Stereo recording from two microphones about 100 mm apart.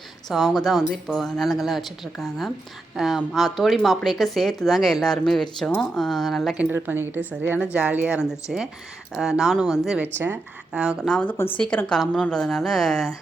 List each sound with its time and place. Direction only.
0.3 s speech: centre (ahead or behind)
6.6 s a woman's voice: 20° right (ahead or behind)
11.3 s speech: 20° left (ahead or behind)
11.6 s a woman's voice: 10° left (ahead or behind)